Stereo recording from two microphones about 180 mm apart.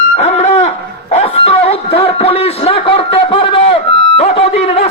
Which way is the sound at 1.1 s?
35° left (ahead or behind).